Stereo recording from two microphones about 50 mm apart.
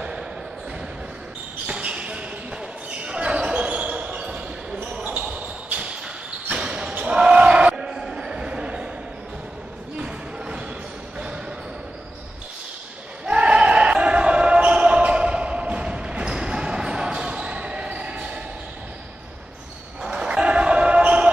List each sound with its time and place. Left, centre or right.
1.7 s basketball bounce: right
5.0 s basketball bounce: right
9.9 s a sound: centre
13.2 s basketball bounce: right
20.0 s basketball bounce: centre